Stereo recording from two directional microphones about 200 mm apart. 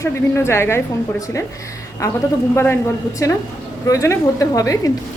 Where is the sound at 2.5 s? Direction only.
10° left (ahead or behind).